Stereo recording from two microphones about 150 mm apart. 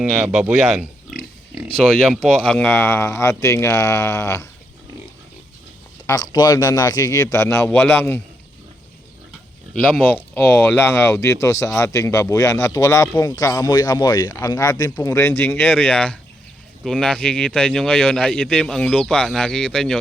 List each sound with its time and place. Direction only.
0.0 s speech: 5° right (ahead or behind); by 4.4 s 20° left (ahead or behind)
6.1 s speech: 25° left (ahead or behind)
9.9 s speech: 10° left (ahead or behind)